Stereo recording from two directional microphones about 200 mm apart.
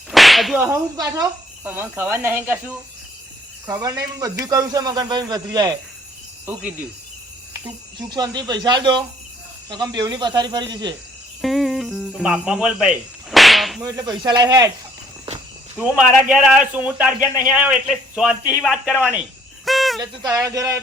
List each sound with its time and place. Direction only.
0.1 s whip: centre (ahead or behind)
0.7 s speech: 15° right (ahead or behind)
7.9 s speech: 20° right (ahead or behind)
11.4 s speech: centre (ahead or behind)
13.3 s whip: centre (ahead or behind)
13.8 s speech: 20° right (ahead or behind)
16.3 s a man's voice: 5° right (ahead or behind)
19.6 s cricket: centre (ahead or behind)
20.0 s speech: 15° right (ahead or behind)